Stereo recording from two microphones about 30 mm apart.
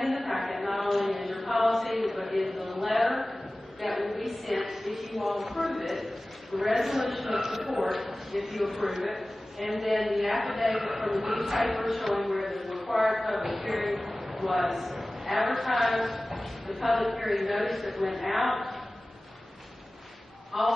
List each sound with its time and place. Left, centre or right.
0.0 s chant: centre
3.8 s a sound: centre
6.6 s a man's voice: centre
20.5 s a man's voice: centre